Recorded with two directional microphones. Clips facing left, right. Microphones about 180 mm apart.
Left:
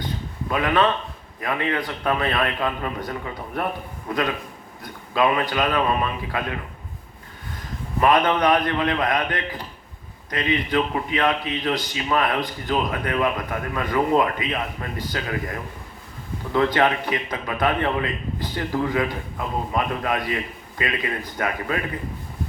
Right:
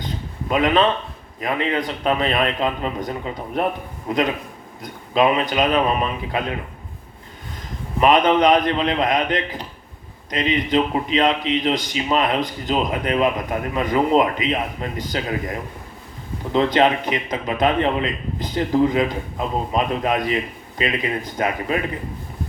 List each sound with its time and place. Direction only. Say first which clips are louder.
0.0 s a sound: even; 20° right (ahead or behind)
1.4 s a man's voice: right 3 dB; 20° right (ahead or behind)
8.0 s a man's voice: right 3 dB; 20° right (ahead or behind)